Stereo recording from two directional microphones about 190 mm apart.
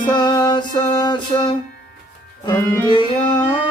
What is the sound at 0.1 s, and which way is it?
Music, 25° left (ahead or behind).